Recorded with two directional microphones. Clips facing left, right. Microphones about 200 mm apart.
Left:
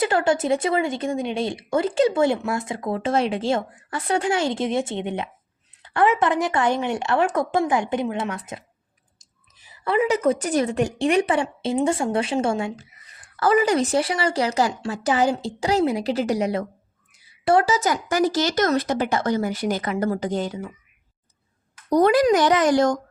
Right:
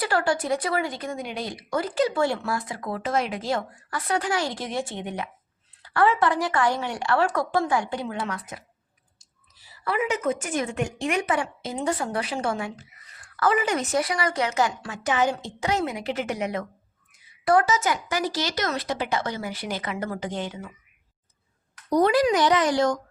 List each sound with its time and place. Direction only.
0.0 s speech: 20° left (ahead or behind)
9.1 s clicking: 20° left (ahead or behind)
10.1 s speech: 35° left (ahead or behind)
13.5 s speech: 35° left (ahead or behind)
21.9 s speech: 45° left (ahead or behind)